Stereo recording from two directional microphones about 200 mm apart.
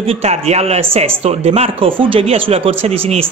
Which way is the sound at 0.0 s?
30° right (ahead or behind).